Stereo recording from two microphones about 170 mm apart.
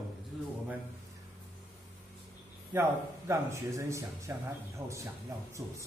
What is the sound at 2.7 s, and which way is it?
Speech, 15° right (ahead or behind).